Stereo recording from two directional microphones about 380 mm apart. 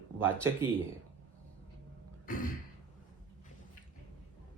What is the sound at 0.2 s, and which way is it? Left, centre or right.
Speech, centre.